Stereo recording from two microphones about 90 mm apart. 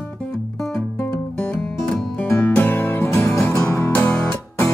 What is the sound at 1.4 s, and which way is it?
Music, 20° left (ahead or behind).